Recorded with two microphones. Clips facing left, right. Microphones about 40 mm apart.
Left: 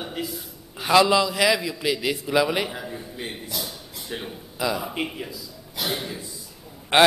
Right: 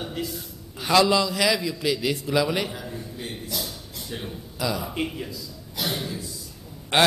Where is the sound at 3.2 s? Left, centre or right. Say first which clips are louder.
Left 1 dB; centre.